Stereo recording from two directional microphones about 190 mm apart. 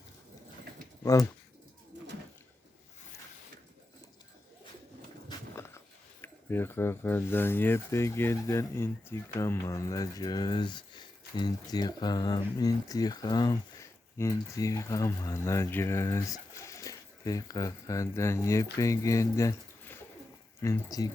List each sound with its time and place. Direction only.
1.0 s speech: 15° left (ahead or behind)
5.5 s a sound: 15° left (ahead or behind)
6.2 s speech: 10° left (ahead or behind)